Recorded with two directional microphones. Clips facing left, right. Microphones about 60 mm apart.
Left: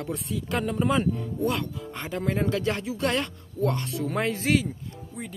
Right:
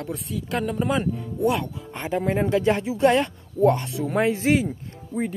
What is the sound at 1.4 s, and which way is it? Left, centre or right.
Speech, right.